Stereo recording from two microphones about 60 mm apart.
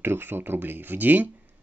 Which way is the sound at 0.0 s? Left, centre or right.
Right.